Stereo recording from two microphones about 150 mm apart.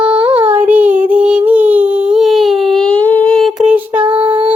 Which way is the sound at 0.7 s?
10° right (ahead or behind).